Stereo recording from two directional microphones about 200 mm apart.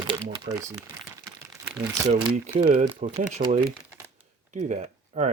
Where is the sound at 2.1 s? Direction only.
35° right (ahead or behind).